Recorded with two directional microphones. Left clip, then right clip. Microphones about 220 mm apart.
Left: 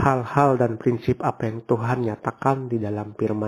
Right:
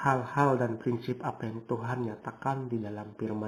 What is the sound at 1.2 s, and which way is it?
Speech, 50° left (ahead or behind).